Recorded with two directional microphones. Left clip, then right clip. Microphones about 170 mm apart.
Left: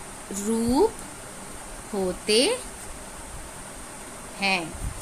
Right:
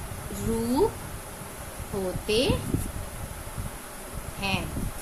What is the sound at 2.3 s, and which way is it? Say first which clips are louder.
Speech: left 4 dB; 60° left (ahead or behind).